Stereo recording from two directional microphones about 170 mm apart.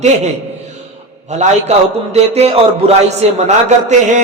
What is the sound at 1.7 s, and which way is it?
A man's voice, 40° right (ahead or behind).